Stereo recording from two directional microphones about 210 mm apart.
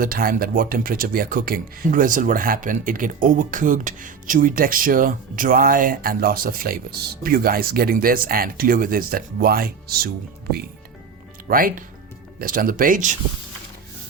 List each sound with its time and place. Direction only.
0.0 s speech: 45° right (ahead or behind)
11.4 s speech: 45° right (ahead or behind)